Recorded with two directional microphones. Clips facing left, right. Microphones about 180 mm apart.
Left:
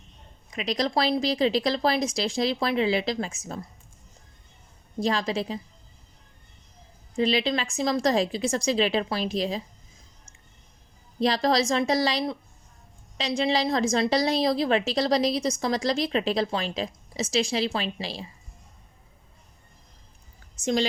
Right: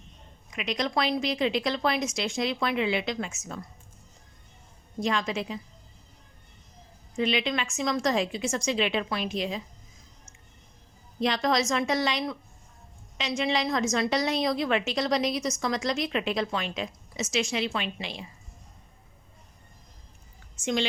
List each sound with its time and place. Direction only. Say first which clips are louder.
0.5 s a woman's voice: left 3 dB; 35° left (ahead or behind)
4.9 s a woman's voice: left 2 dB; 35° left (ahead or behind)
7.2 s a woman's voice: left 3 dB; 35° left (ahead or behind)
11.2 s a woman's voice: left 3 dB; 35° left (ahead or behind)
20.6 s a woman's voice: left 3 dB; 40° left (ahead or behind)